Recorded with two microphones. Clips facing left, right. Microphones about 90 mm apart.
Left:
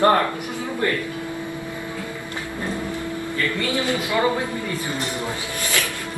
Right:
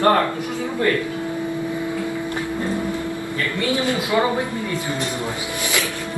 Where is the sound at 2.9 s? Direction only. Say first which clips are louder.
Right 2 dB; 20° right (ahead or behind).